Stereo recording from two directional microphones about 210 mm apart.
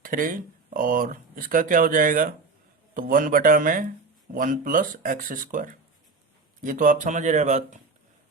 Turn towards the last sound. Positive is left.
turn(degrees=-35)  # may be behind; listen again after turning